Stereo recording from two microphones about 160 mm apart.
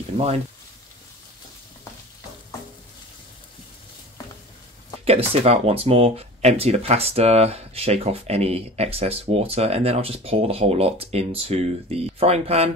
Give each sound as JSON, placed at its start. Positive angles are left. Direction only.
{"t": 5.0, "sound": "speech", "side_deg": -40}